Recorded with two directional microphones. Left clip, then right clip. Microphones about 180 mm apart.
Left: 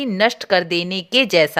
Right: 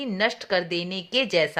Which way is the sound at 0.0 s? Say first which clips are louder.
Left 7 dB; 40° left (ahead or behind).